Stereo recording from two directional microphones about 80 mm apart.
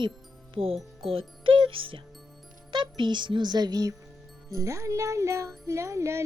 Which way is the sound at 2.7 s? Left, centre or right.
Right.